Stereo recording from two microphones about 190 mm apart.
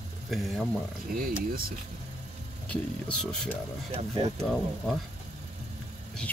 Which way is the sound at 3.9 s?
30° right (ahead or behind).